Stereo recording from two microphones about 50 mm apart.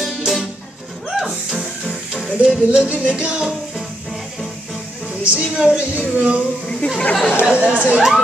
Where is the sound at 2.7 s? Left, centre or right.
Right.